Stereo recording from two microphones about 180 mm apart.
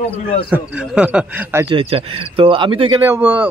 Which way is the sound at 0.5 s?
5° right (ahead or behind).